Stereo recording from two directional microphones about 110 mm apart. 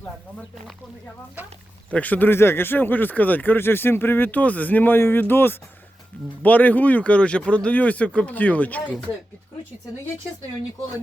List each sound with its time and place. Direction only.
1.9 s speech: 15° left (ahead or behind)